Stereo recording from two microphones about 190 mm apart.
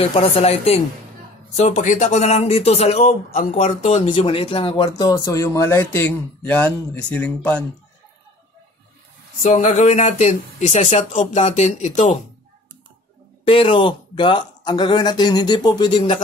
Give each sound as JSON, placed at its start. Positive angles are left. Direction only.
{"t": 0.0, "sound": "speech", "side_deg": 30}
{"t": 9.4, "sound": "speech", "side_deg": 40}
{"t": 13.5, "sound": "speech", "side_deg": 25}